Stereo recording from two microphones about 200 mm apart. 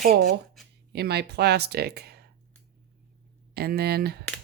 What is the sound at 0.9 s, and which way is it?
Speech, 55° right (ahead or behind).